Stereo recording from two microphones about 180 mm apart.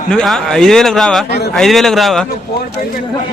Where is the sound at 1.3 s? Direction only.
65° left (ahead or behind).